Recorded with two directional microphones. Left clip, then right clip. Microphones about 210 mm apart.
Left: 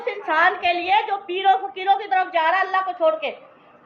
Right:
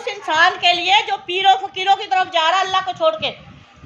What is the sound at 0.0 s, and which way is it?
A woman's voice, 40° right (ahead or behind).